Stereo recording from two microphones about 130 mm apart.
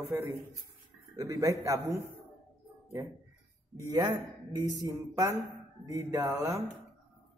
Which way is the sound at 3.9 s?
25° right (ahead or behind).